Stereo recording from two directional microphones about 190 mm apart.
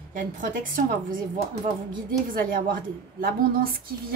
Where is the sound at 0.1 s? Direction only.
45° right (ahead or behind).